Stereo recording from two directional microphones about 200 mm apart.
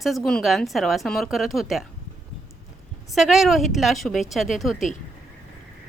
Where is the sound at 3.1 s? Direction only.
Centre (ahead or behind).